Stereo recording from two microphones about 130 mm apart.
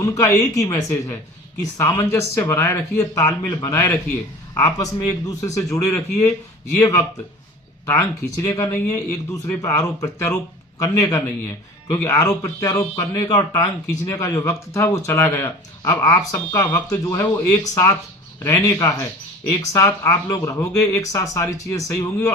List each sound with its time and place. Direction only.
0.0 s speech: 25° left (ahead or behind)